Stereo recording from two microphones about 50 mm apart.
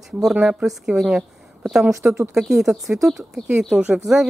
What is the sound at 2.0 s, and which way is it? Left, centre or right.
Speech, right.